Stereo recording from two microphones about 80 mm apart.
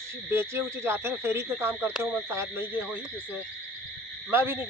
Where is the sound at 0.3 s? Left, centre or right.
Right.